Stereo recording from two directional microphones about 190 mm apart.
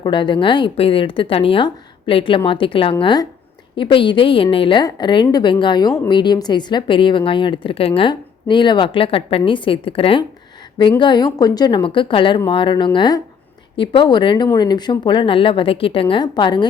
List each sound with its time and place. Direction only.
0.0 s a woman's voice: 25° left (ahead or behind)